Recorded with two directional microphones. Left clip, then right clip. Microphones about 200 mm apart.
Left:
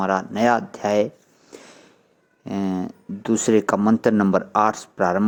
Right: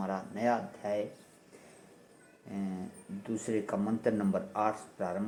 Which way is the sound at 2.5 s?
45° left (ahead or behind).